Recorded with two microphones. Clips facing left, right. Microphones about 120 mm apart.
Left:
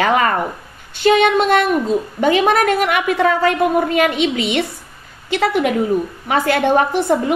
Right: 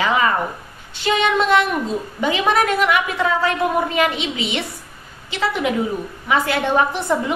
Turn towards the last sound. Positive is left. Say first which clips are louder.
# left 4 dB
turn(degrees=50)  # may be behind; listen again after turning